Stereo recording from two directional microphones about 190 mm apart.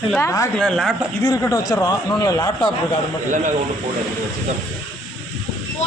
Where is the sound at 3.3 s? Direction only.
40° right (ahead or behind).